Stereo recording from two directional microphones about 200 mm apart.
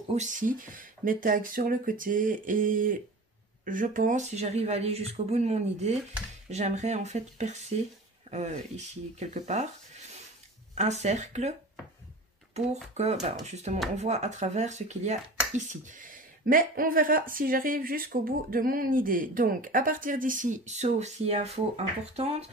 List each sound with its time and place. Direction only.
0.1 s speech: 40° right (ahead or behind)
10.7 s speech: 35° right (ahead or behind)
12.5 s speech: 35° right (ahead or behind)